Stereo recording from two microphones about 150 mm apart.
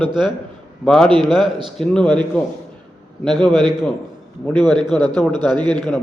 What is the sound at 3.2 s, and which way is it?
A man's voice, centre (ahead or behind).